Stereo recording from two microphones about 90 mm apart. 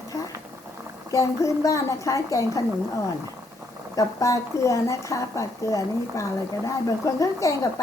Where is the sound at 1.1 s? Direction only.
35° left (ahead or behind).